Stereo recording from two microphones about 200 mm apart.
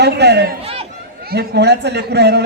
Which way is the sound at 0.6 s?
30° right (ahead or behind).